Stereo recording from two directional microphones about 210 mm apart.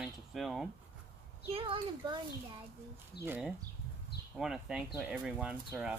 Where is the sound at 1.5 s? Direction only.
25° right (ahead or behind).